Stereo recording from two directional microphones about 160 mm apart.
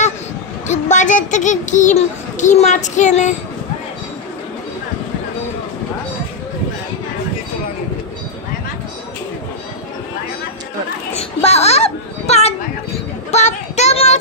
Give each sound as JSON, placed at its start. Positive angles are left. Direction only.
{"t": 0.7, "sound": "a child's voice", "side_deg": 50}
{"t": 11.1, "sound": "children playing", "side_deg": 40}